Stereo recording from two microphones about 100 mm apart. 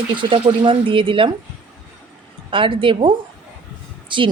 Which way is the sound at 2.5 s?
60° right (ahead or behind).